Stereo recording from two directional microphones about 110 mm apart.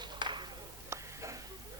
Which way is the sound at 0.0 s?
45° right (ahead or behind).